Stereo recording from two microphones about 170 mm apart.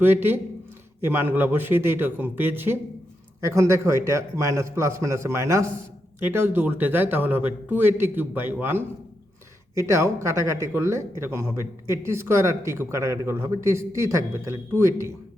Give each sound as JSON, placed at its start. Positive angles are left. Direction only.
{"t": 0.0, "sound": "speech", "side_deg": -10}